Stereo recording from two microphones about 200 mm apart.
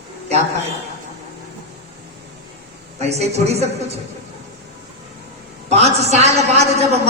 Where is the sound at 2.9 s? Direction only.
35° right (ahead or behind).